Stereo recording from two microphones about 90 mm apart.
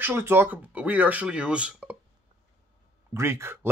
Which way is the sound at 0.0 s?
25° right (ahead or behind).